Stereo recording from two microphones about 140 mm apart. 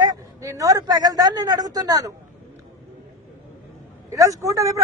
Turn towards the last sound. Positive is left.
turn(degrees=-25)  # may be behind; listen again after turning